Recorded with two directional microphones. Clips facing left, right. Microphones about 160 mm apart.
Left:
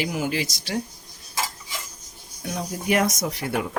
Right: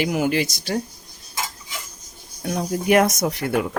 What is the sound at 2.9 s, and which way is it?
Speech, 60° right (ahead or behind).